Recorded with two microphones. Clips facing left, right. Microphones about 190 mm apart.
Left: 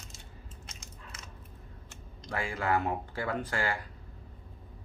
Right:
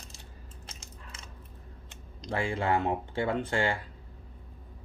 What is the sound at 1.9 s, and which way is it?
Speech, 20° right (ahead or behind).